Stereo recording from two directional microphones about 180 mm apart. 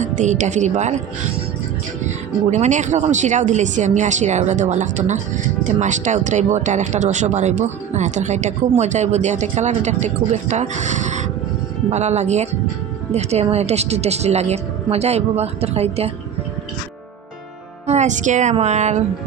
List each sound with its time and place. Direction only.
0.0 s speech: 45° right (ahead or behind)
2.0 s speech: 40° right (ahead or behind)
17.8 s speech: 40° right (ahead or behind)